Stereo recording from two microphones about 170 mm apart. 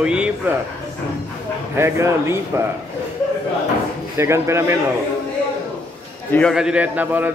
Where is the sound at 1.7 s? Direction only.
15° right (ahead or behind).